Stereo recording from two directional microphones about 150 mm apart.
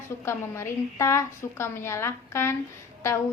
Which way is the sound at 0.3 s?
20° left (ahead or behind).